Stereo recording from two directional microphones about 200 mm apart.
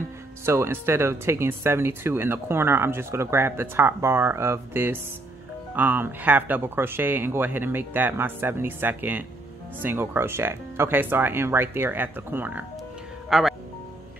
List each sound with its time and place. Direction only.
0.5 s speech: 10° right (ahead or behind)